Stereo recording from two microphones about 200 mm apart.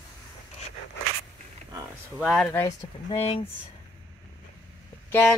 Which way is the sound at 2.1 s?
Centre (ahead or behind).